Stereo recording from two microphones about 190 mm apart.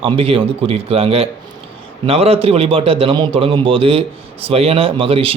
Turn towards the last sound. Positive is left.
turn(degrees=-30)  # may be behind; listen again after turning